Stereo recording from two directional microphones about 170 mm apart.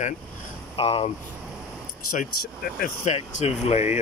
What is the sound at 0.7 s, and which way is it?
Speech, 35° left (ahead or behind).